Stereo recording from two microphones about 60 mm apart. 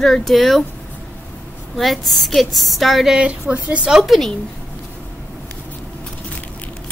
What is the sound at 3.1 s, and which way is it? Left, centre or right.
Speech, right.